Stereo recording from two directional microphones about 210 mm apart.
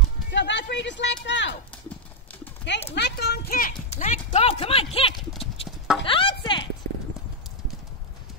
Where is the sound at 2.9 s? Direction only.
50° left (ahead or behind).